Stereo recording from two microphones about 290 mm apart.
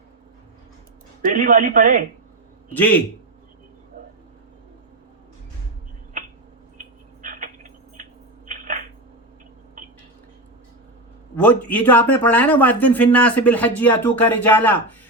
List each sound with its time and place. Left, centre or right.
1.2 s speech: right
2.7 s speech: centre
6.7 s tick-tock: right
8.4 s a sound: right
11.3 s speech: centre